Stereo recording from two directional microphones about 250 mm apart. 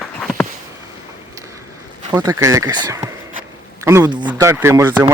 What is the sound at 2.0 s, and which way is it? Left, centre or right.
Speech, centre.